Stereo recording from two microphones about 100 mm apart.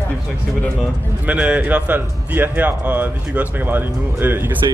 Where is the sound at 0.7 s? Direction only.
15° right (ahead or behind).